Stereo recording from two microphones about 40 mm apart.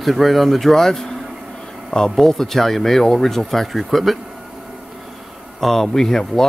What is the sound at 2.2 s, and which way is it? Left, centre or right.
Speech, centre.